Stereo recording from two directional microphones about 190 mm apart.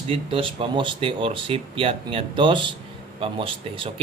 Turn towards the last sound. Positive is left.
turn(degrees=-30)  # may be behind; listen again after turning